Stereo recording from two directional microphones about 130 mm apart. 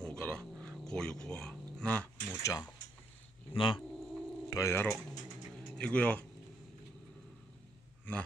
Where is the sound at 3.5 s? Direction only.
40° left (ahead or behind).